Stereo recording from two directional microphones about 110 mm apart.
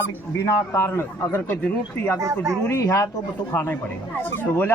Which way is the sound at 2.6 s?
30° left (ahead or behind).